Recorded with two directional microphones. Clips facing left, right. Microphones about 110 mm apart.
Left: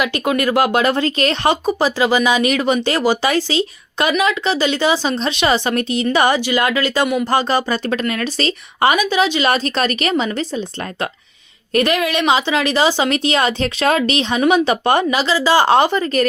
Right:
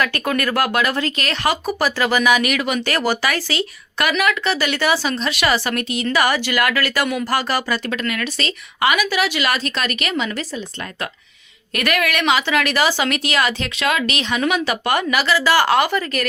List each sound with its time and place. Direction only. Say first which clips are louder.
0.0 s a woman's voice: left 3 dB; 20° left (ahead or behind)
1.6 s a woman's voice: left 4 dB; 20° left (ahead or behind)
11.7 s a woman's voice: left 4 dB; 25° left (ahead or behind)